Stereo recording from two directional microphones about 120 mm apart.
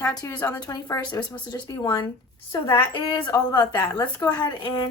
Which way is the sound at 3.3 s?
35° left (ahead or behind).